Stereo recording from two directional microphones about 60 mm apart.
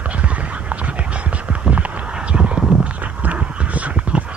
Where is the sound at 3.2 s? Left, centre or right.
Right.